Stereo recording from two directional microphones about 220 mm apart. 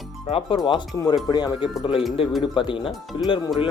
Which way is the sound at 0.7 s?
20° left (ahead or behind).